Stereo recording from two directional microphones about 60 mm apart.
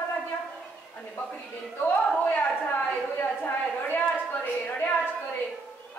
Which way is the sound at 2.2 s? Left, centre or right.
Left.